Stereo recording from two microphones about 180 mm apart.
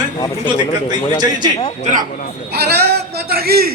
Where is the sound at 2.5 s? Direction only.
65° right (ahead or behind).